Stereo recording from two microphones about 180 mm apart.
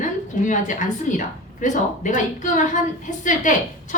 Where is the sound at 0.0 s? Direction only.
45° left (ahead or behind).